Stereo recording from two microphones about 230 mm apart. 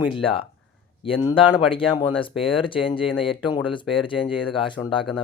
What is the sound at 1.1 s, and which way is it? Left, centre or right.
Speech, left.